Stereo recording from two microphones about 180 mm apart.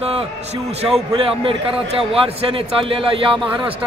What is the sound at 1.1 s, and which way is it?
A man's voice, 30° right (ahead or behind).